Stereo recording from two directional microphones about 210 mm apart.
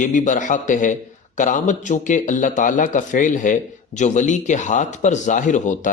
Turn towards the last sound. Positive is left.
turn(degrees=35)  # may be behind; listen again after turning